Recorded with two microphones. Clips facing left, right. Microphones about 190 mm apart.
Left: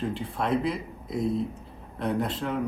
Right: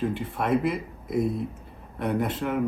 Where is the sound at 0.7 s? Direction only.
60° right (ahead or behind).